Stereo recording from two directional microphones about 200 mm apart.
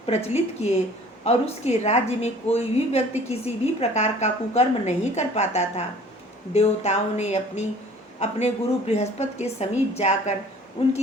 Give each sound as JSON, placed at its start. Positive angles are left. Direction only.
{"t": 0.0, "sound": "a woman's voice", "side_deg": 35}